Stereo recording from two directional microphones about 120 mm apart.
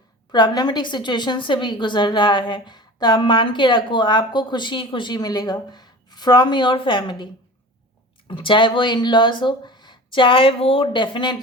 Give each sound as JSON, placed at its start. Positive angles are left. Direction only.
{"t": 0.3, "sound": "a woman's voice", "side_deg": 35}
{"t": 8.3, "sound": "a woman's voice", "side_deg": 45}